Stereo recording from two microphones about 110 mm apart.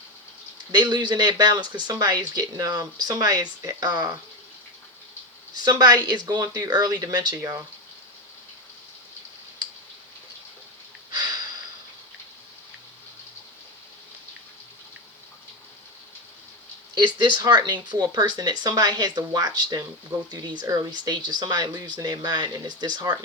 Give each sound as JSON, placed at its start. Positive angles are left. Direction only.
{"t": 0.7, "sound": "speech", "side_deg": -40}
{"t": 5.6, "sound": "speech", "side_deg": -40}
{"t": 17.2, "sound": "speech", "side_deg": -45}